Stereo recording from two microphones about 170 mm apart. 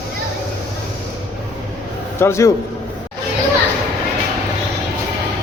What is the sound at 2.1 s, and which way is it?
Speech, 15° left (ahead or behind).